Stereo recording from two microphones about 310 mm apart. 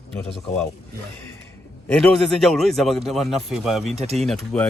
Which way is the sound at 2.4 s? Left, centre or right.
Centre.